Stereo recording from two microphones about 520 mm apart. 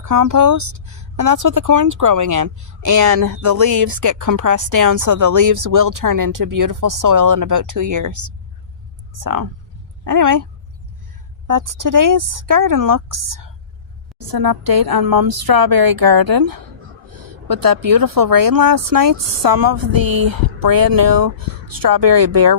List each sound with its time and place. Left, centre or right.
0.0 s speech: right
11.4 s speech: right